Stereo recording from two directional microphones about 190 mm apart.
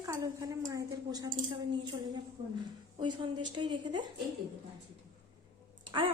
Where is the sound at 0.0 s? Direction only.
15° right (ahead or behind).